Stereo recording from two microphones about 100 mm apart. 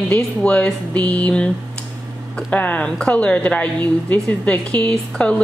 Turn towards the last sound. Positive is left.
turn(degrees=10)  # may be behind; listen again after turning